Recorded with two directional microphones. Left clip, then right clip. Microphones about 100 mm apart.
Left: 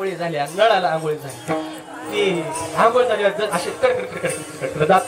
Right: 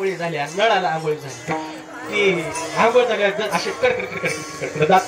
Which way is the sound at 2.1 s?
55° left (ahead or behind).